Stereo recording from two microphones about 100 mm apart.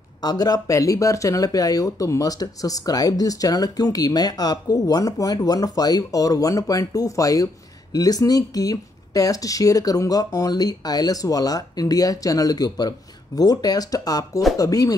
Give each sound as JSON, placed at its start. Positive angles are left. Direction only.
{"t": 0.2, "sound": "speech", "side_deg": 40}